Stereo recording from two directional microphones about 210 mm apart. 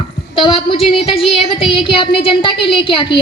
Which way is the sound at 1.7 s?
25° left (ahead or behind).